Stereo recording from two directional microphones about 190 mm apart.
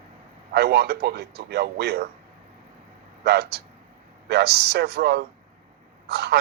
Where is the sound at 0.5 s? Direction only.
60° right (ahead or behind).